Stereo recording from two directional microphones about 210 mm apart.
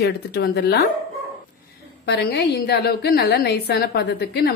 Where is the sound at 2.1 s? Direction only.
55° left (ahead or behind).